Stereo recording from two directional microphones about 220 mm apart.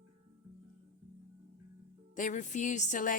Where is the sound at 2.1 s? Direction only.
35° left (ahead or behind).